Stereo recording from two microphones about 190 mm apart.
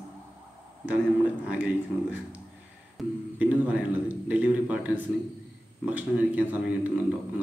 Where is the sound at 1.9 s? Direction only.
15° right (ahead or behind).